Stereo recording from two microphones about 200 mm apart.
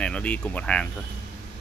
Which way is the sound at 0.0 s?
5° left (ahead or behind).